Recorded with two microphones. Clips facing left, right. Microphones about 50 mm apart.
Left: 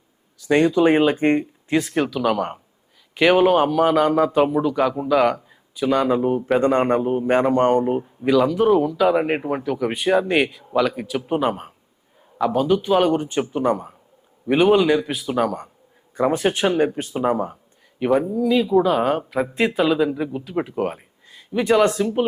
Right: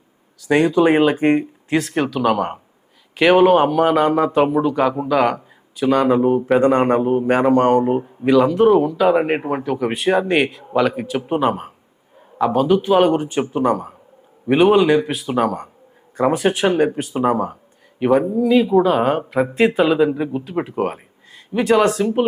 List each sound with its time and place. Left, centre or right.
0.4 s a man's voice: centre
14.4 s a man's voice: centre
20.8 s a sound: centre
21.6 s a man's voice: centre